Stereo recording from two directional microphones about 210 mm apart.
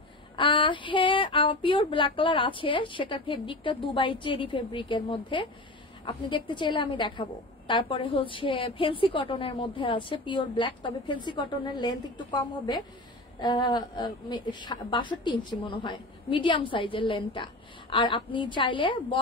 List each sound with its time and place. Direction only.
0.4 s a woman's voice: 25° left (ahead or behind)